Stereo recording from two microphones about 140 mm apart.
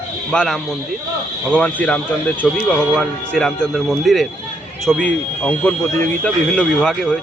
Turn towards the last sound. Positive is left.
turn(degrees=5)  # may be behind; listen again after turning